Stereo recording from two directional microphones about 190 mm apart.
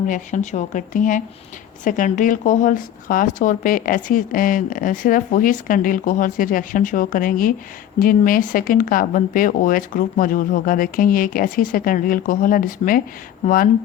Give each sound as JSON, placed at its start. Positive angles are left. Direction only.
{"t": 0.1, "sound": "speech", "side_deg": 40}